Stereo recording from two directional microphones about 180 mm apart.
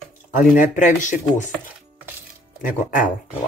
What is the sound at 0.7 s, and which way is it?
Speech, 45° left (ahead or behind).